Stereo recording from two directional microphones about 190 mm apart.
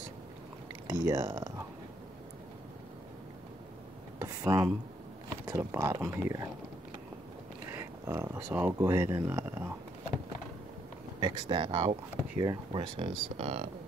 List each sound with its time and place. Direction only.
0.8 s speech: 20° right (ahead or behind)
4.2 s a sound: 20° right (ahead or behind)
5.5 s speech: 15° right (ahead or behind)
7.7 s speech: 15° right (ahead or behind)
11.1 s speech: 20° right (ahead or behind)